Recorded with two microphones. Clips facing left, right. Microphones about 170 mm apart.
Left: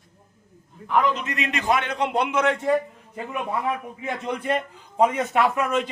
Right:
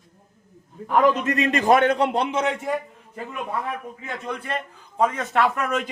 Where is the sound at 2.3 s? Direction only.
20° right (ahead or behind).